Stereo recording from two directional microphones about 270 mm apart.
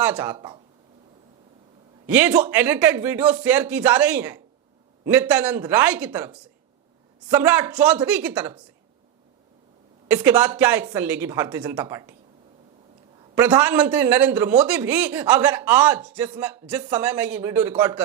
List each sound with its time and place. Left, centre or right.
0.0 s speech: centre
0.3 s speech: centre
2.0 s a man's voice: centre
10.1 s speech: centre
13.3 s a man's voice: centre